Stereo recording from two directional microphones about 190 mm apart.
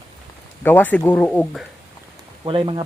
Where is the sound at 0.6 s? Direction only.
10° left (ahead or behind).